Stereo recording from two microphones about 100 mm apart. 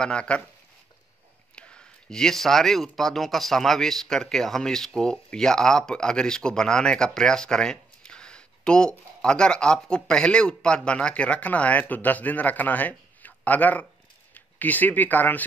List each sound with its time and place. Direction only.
0.0 s speech: 10° left (ahead or behind)
1.5 s speech: 10° left (ahead or behind)